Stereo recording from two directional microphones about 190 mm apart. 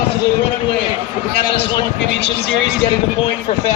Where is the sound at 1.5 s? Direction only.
30° left (ahead or behind).